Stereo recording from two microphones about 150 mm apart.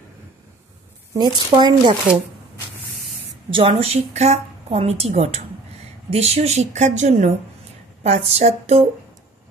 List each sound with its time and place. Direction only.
1.1 s speech: 30° right (ahead or behind)
3.4 s a woman's voice: 35° right (ahead or behind)